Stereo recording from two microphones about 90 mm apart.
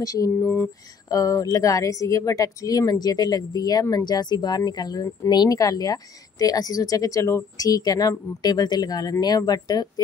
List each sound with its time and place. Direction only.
0.0 s speech: 40° left (ahead or behind)
0.4 s mantra: 25° left (ahead or behind)
1.0 s speech: 40° left (ahead or behind)